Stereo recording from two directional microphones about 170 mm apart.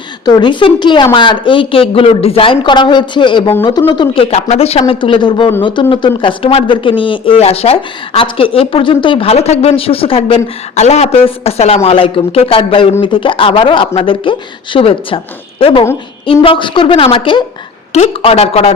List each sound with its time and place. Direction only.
0.3 s speech: 25° left (ahead or behind)